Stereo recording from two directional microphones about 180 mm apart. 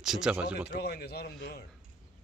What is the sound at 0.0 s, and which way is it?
Speech, centre (ahead or behind).